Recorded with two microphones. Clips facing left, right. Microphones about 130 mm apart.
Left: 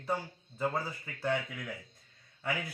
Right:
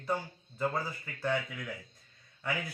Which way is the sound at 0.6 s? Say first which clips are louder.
Even; 15° left (ahead or behind).